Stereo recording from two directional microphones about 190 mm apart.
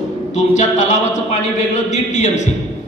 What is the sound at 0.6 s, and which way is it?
A man's voice, 40° left (ahead or behind).